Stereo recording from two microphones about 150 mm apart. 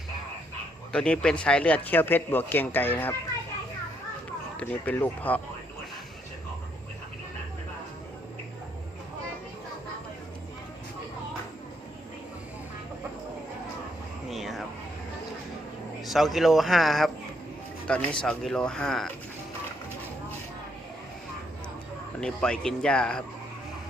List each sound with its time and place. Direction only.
0.9 s speech: 5° left (ahead or behind)
4.5 s speech: 10° left (ahead or behind)
14.3 s a sound: centre (ahead or behind)
16.0 s speech: centre (ahead or behind)
22.2 s speech: 5° left (ahead or behind)